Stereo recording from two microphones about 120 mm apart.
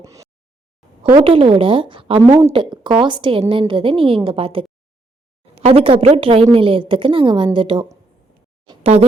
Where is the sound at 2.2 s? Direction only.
25° right (ahead or behind).